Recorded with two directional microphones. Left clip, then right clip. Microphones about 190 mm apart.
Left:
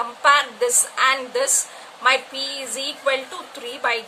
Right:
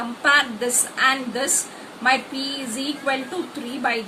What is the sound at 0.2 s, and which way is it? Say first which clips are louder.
A woman's voice: left 2 dB; 50° left (ahead or behind).